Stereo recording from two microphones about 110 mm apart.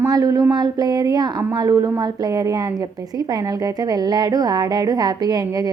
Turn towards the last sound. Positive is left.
turn(degrees=-35)  # may be behind; listen again after turning